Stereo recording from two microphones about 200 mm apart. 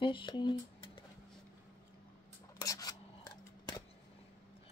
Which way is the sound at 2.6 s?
15° left (ahead or behind).